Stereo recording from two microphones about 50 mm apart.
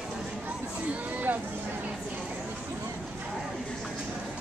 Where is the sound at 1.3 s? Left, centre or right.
Right.